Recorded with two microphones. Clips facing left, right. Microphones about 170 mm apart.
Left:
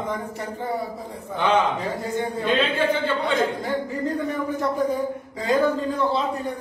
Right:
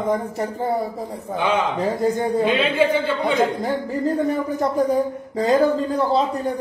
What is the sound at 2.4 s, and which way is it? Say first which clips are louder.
Speech: right 2 dB; 10° right (ahead or behind).